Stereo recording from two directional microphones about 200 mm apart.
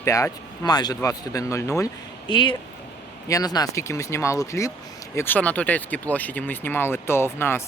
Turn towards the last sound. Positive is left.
turn(degrees=10)  # may be behind; listen again after turning